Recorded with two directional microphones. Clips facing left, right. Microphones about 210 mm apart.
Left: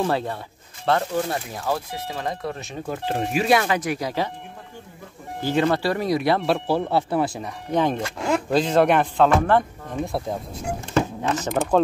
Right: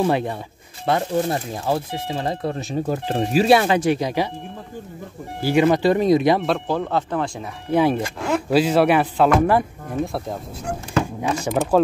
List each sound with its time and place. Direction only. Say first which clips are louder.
0.0 s speech: right 3 dB; 15° right (ahead or behind)
5.4 s speech: right 4 dB; 10° right (ahead or behind)
6.4 s speech: even; 5° left (ahead or behind)
7.7 s speech: right 4 dB; 10° right (ahead or behind)
11.1 s speech: right 2 dB; 10° right (ahead or behind)